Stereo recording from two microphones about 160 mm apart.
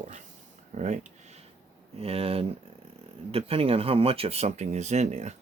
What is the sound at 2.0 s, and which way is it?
Speech, 35° right (ahead or behind).